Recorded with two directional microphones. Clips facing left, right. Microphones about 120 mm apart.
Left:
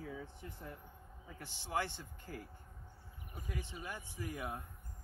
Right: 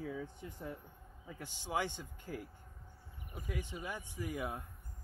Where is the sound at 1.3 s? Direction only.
15° right (ahead or behind).